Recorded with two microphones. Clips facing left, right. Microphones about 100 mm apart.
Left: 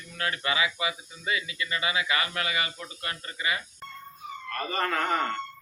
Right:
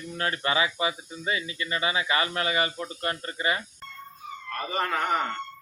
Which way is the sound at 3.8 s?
10° left (ahead or behind).